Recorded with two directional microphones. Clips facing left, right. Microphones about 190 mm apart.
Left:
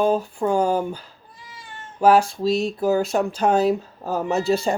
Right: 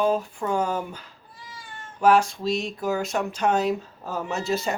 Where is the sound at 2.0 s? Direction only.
35° left (ahead or behind).